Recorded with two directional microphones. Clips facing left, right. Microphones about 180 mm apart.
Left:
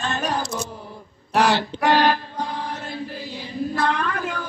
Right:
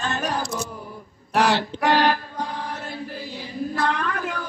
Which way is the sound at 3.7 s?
30° left (ahead or behind).